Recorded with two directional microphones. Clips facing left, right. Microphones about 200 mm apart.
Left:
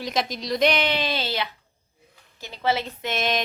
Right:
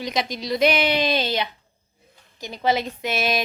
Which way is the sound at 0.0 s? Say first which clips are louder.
Right 1 dB; centre (ahead or behind).